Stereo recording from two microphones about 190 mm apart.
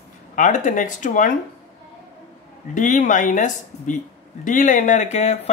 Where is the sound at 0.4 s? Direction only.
40° left (ahead or behind).